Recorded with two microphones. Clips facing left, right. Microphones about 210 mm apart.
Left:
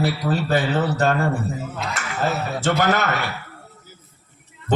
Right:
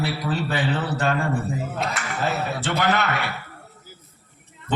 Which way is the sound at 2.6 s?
45° left (ahead or behind).